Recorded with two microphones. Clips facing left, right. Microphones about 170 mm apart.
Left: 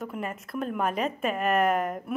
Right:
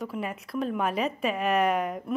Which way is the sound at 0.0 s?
Centre (ahead or behind).